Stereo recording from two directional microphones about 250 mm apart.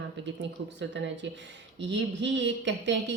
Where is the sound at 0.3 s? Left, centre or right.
Right.